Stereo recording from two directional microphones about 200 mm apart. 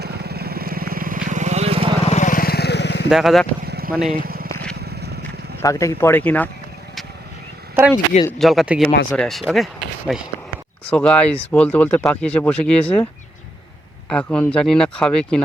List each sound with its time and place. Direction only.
0.0 s vehicle: 55° right (ahead or behind); by 1.9 s 30° right (ahead or behind)
2.0 s vehicle: 35° left (ahead or behind); by 3.1 s 60° left (ahead or behind)
3.1 s speech: centre (ahead or behind)
3.7 s a sound: 50° right (ahead or behind)
4.1 s vehicle: 50° right (ahead or behind)
5.6 s speech: 15° left (ahead or behind)
7.9 s speech: 25° left (ahead or behind)
8.4 s speech: centre (ahead or behind)
14.1 s speech: 5° left (ahead or behind)